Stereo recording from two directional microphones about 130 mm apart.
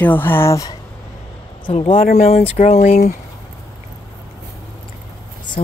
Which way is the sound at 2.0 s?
60° left (ahead or behind).